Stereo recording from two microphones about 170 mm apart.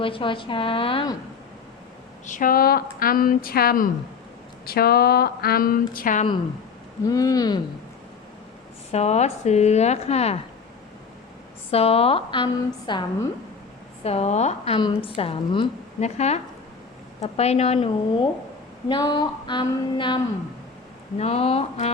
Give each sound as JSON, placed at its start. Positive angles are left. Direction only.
{"t": 0.0, "sound": "a woman's voice", "side_deg": 30}
{"t": 2.2, "sound": "speech", "side_deg": 50}
{"t": 7.1, "sound": "a sound", "side_deg": 20}
{"t": 8.9, "sound": "a woman's voice", "side_deg": 40}
{"t": 11.7, "sound": "a woman's voice", "side_deg": 35}
{"t": 14.0, "sound": "a woman's voice", "side_deg": 35}
{"t": 14.8, "sound": "a woman's voice", "side_deg": 30}
{"t": 18.9, "sound": "a sound", "side_deg": 25}
{"t": 21.2, "sound": "a woman's voice", "side_deg": 35}